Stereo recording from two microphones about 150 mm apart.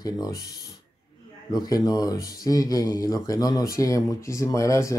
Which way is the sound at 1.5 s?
25° left (ahead or behind).